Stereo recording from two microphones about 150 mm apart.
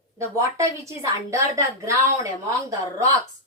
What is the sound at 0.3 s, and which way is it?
A woman's voice, 20° right (ahead or behind).